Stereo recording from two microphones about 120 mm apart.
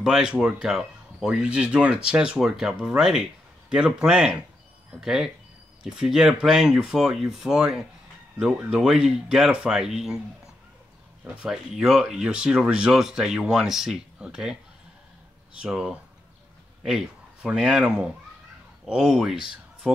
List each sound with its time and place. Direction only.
0.0 s speech: 5° right (ahead or behind)
11.4 s speech: 5° right (ahead or behind)
15.6 s speech: 5° right (ahead or behind)